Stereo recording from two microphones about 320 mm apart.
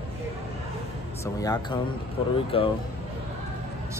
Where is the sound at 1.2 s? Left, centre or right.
Centre.